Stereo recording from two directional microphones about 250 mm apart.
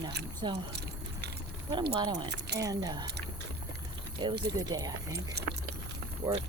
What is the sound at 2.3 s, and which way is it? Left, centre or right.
Speech, right.